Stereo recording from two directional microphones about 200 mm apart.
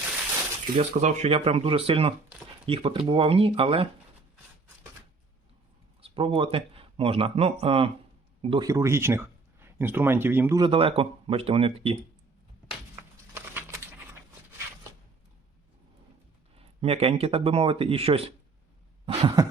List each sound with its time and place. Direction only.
0.8 s speech: 35° right (ahead or behind)
6.0 s speech: 25° right (ahead or behind)
8.6 s speech: 15° right (ahead or behind)
10.6 s speech: 30° right (ahead or behind)
13.3 s a sound: 10° right (ahead or behind)
16.6 s speech: 30° right (ahead or behind)